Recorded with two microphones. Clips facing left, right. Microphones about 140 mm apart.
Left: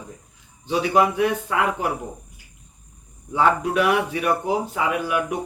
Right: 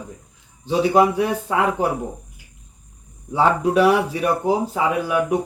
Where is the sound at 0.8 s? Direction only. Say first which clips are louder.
Right 3 dB; 35° right (ahead or behind).